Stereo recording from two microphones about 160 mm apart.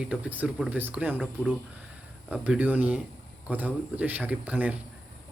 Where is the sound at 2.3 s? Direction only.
10° right (ahead or behind).